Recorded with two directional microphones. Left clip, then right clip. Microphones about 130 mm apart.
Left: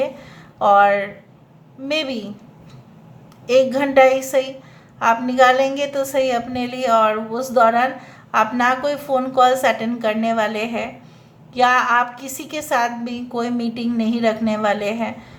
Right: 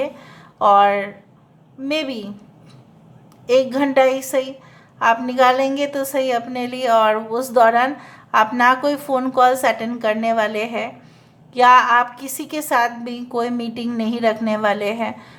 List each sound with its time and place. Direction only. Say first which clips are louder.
0.0 s a sound: left 2 dB; 30° right (ahead or behind)
1.9 s a woman's voice: left 1 dB; 30° right (ahead or behind)
3.4 s a woman's voice: left 1 dB; 30° right (ahead or behind)